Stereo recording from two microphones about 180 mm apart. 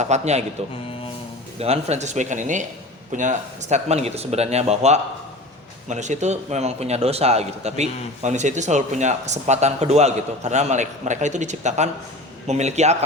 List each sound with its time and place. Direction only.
0.0 s a man's voice: 40° right (ahead or behind)
1.5 s a man's voice: 35° right (ahead or behind)